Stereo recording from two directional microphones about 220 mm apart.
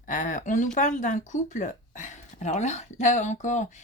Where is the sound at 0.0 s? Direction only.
35° left (ahead or behind).